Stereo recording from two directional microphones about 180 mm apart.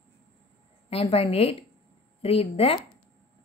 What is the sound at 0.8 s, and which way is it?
A woman's voice, 35° left (ahead or behind).